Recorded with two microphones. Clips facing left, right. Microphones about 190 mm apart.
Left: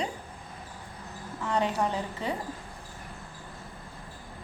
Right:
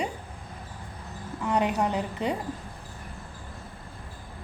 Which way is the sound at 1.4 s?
15° right (ahead or behind).